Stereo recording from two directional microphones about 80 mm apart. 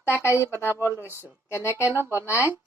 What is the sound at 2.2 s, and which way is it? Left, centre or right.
Speech, left.